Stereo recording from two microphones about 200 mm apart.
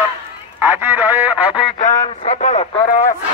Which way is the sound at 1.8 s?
35° left (ahead or behind).